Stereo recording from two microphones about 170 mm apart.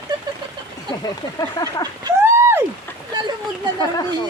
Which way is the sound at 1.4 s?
20° left (ahead or behind).